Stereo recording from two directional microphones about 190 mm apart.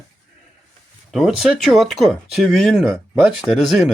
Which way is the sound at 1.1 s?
Centre (ahead or behind).